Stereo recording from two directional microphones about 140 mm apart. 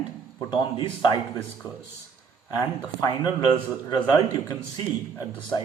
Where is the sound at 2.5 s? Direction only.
30° left (ahead or behind).